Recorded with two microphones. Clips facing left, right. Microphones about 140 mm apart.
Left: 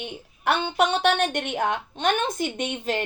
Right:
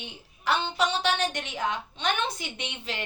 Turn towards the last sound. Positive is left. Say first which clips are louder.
# left 9 dB
turn(degrees=50)  # may be behind; listen again after turning